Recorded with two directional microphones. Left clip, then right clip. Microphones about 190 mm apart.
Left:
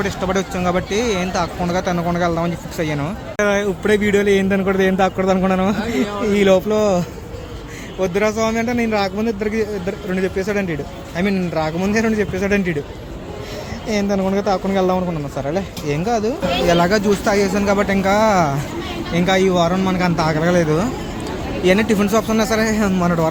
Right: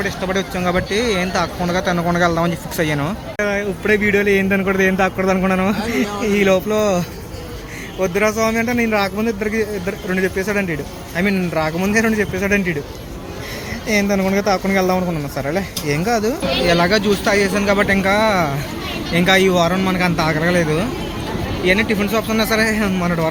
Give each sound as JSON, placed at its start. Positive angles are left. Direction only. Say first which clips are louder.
{"t": 0.0, "sound": "speech", "louder": "even", "side_deg": 20}
{"t": 3.3, "sound": "speech", "louder": "left 3 dB", "side_deg": 20}
{"t": 8.0, "sound": "speech", "louder": "right 1 dB", "side_deg": 10}
{"t": 13.8, "sound": "speech", "louder": "right 2 dB", "side_deg": 0}